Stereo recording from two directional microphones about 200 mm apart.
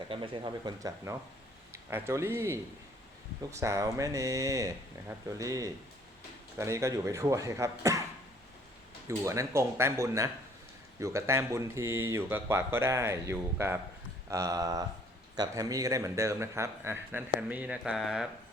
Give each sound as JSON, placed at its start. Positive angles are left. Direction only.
{"t": 0.1, "sound": "speech", "side_deg": -25}
{"t": 9.0, "sound": "speech", "side_deg": -15}
{"t": 17.5, "sound": "a sound", "side_deg": -5}